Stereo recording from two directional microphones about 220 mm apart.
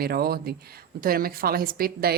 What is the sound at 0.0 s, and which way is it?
A woman's voice, 45° right (ahead or behind).